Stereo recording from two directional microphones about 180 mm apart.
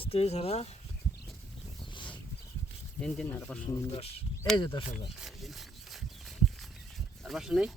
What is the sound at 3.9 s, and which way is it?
Speech, 35° left (ahead or behind).